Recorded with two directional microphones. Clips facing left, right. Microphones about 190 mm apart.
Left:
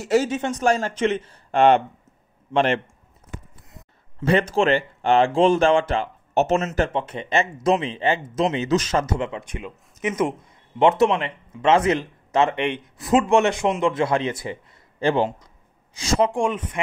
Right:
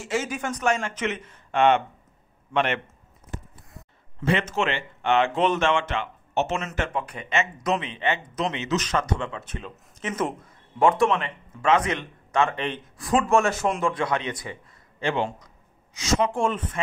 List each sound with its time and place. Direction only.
0.0 s speech: 40° left (ahead or behind)
0.3 s speech: 25° left (ahead or behind)
4.2 s a man's voice: 35° left (ahead or behind); by 10.3 s 10° left (ahead or behind)
10.8 s a man's voice: 25° left (ahead or behind)
15.2 s a sound: 30° left (ahead or behind)
16.3 s speech: 10° left (ahead or behind)